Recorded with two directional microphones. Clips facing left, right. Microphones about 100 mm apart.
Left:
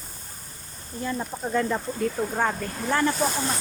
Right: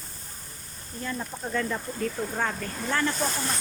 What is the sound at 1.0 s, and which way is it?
Speech, 20° left (ahead or behind).